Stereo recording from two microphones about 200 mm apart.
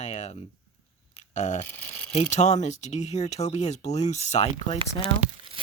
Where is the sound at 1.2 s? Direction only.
35° left (ahead or behind).